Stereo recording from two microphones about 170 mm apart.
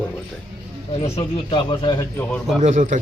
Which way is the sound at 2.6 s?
45° right (ahead or behind).